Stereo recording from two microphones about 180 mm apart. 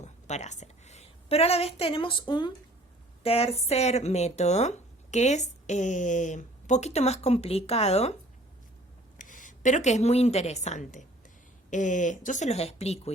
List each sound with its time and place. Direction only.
0.0 s a woman's voice: 40° left (ahead or behind)
9.1 s a woman's voice: 50° left (ahead or behind)